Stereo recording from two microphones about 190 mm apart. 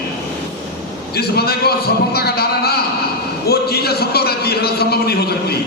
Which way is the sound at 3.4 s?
55° left (ahead or behind).